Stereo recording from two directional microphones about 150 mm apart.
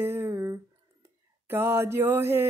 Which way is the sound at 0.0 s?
15° right (ahead or behind).